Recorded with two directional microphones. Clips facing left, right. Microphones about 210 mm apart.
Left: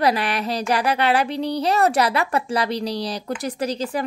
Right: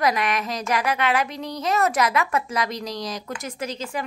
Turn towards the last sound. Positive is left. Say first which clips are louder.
# left 5 dB
turn(degrees=35)  # may be behind; listen again after turning